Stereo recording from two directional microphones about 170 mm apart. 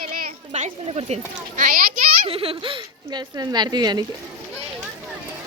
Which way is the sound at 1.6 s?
55° right (ahead or behind).